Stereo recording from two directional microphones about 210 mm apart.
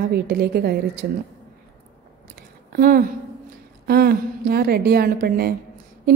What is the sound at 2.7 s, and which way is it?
A woman's voice, 45° right (ahead or behind).